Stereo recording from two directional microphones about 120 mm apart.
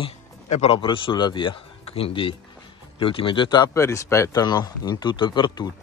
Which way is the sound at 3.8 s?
25° left (ahead or behind).